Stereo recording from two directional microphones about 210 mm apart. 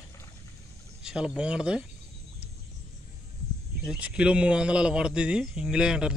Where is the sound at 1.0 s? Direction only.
5° right (ahead or behind).